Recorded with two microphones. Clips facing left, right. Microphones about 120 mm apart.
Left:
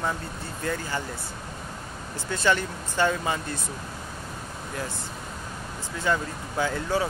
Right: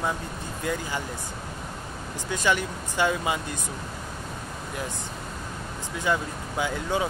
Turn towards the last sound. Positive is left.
turn(degrees=-15)  # may be behind; listen again after turning